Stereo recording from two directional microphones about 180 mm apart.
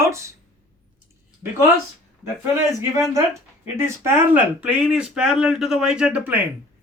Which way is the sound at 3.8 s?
15° right (ahead or behind).